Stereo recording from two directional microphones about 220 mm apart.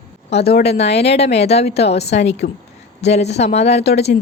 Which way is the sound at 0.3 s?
30° left (ahead or behind).